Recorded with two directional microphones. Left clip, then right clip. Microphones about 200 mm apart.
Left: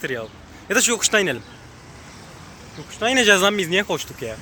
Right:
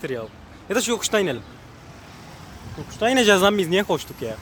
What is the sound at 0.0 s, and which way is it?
Speech, 10° right (ahead or behind).